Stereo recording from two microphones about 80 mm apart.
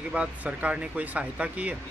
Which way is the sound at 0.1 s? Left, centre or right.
Centre.